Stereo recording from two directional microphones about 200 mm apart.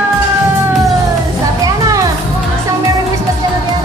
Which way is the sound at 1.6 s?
15° right (ahead or behind).